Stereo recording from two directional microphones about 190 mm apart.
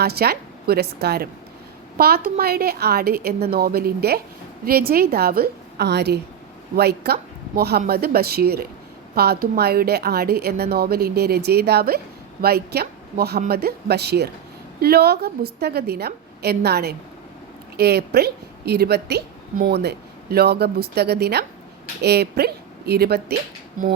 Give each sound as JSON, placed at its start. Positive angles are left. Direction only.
{"t": 0.0, "sound": "a woman's voice", "side_deg": -55}